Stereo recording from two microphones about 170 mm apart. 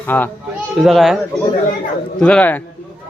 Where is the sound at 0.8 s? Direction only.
Centre (ahead or behind).